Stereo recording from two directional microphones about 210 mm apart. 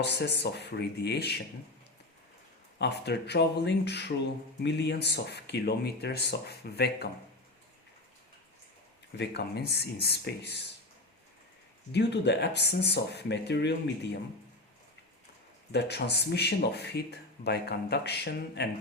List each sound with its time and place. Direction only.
0.0 s speech: 55° left (ahead or behind)
2.7 s speech: 50° left (ahead or behind)
9.1 s speech: 50° left (ahead or behind)
11.9 s speech: 55° left (ahead or behind)
15.7 s speech: 55° left (ahead or behind)